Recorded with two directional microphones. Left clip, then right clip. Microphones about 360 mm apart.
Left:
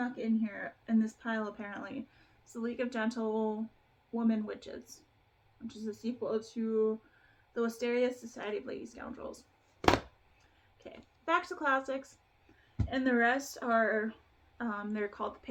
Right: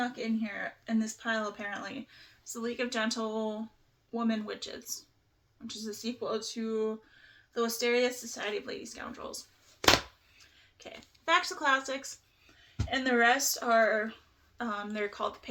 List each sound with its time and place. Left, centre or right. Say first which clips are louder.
0.0 s speech: right 1 dB; centre
3.2 s speech: left 1 dB; right
4.1 s speech: right 1 dB; centre
10.8 s speech: right 3 dB; centre